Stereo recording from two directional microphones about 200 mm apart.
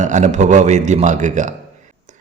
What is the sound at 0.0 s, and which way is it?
A man's voice, 40° right (ahead or behind).